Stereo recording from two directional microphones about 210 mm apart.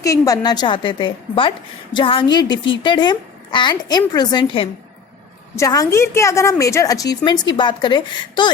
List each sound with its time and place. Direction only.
0.0 s a woman's voice: 15° left (ahead or behind)